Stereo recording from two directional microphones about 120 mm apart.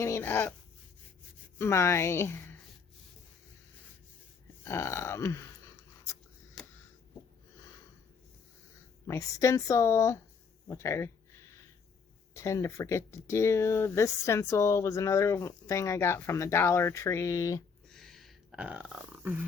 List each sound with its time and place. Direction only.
0.0 s speech: 20° left (ahead or behind)
1.5 s speech: 25° left (ahead or behind)
4.6 s speech: 25° left (ahead or behind)
9.0 s speech: 25° left (ahead or behind)
10.7 s a sound: 25° left (ahead or behind)
12.3 s speech: 25° left (ahead or behind)
17.8 s a sound: 5° left (ahead or behind); by 19.4 s 15° right (ahead or behind)